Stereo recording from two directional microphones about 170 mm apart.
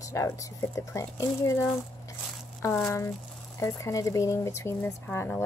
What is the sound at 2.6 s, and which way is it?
Speech, 5° left (ahead or behind).